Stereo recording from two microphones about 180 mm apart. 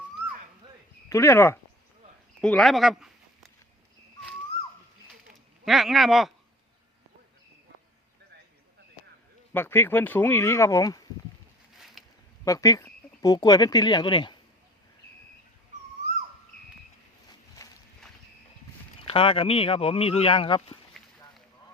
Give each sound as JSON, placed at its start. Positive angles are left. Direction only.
{"t": 1.1, "sound": "speech", "side_deg": 15}
{"t": 5.3, "sound": "speech", "side_deg": 0}
{"t": 9.5, "sound": "speech", "side_deg": 10}
{"t": 12.0, "sound": "a sound", "side_deg": 0}
{"t": 12.5, "sound": "speech", "side_deg": 20}
{"t": 17.6, "sound": "clip-clop", "side_deg": 15}
{"t": 19.0, "sound": "speech", "side_deg": 30}
{"t": 20.9, "sound": "a sound", "side_deg": 0}